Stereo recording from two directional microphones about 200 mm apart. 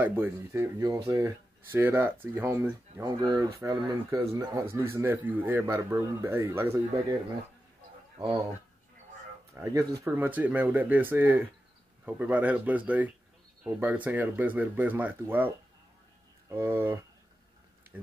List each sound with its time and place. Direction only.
0.0 s a man's voice: 10° right (ahead or behind)
9.5 s a man's voice: 15° right (ahead or behind)